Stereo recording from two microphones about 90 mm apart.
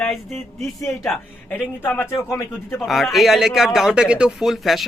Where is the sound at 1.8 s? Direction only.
20° left (ahead or behind).